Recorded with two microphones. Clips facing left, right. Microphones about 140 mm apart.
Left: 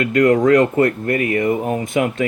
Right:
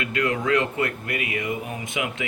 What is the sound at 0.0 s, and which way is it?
Speech, 45° left (ahead or behind).